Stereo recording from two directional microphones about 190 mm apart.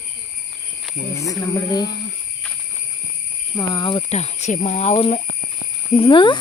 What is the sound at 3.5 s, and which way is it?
Speech, 25° left (ahead or behind).